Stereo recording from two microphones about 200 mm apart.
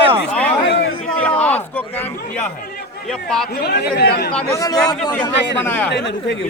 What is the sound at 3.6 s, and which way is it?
Speech, 55° left (ahead or behind).